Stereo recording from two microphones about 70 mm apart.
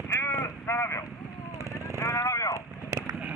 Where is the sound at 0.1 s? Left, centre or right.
Left.